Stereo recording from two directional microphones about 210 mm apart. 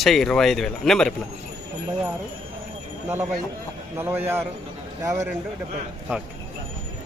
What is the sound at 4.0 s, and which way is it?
A man's voice, 10° right (ahead or behind).